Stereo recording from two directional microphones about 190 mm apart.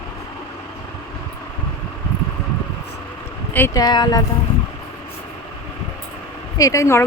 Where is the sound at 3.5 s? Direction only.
15° left (ahead or behind).